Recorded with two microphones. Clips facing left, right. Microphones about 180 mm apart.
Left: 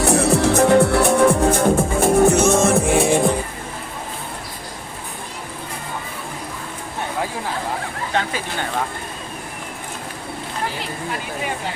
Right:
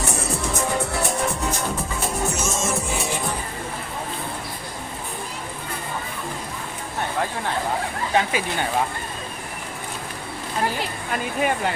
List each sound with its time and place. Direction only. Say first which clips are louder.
0.0 s music: left 10 dB; 60° left (ahead or behind)